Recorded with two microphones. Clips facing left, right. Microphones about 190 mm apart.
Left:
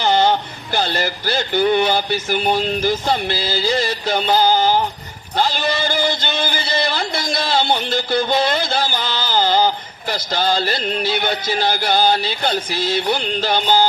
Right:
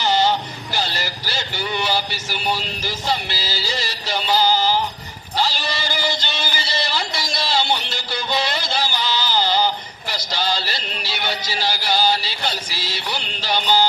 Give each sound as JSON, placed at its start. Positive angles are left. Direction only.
{"t": 0.0, "sound": "speech", "side_deg": 55}